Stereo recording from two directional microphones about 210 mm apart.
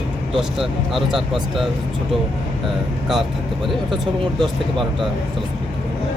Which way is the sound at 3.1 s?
Centre (ahead or behind).